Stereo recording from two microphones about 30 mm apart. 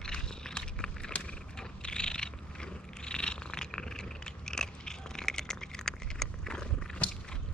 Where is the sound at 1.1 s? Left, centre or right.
Left.